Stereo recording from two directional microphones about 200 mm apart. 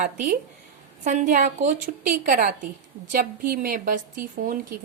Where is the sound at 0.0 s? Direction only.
40° right (ahead or behind).